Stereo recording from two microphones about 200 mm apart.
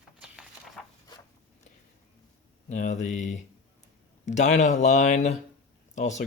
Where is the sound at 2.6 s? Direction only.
35° left (ahead or behind).